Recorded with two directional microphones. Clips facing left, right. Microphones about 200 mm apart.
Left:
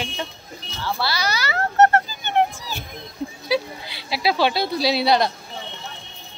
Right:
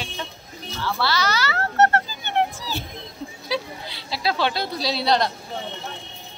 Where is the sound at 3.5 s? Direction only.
10° left (ahead or behind).